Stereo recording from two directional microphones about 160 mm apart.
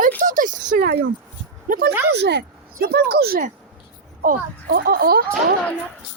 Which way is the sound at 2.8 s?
75° right (ahead or behind).